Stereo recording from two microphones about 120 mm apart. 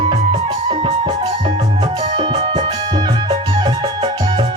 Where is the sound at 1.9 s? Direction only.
45° right (ahead or behind).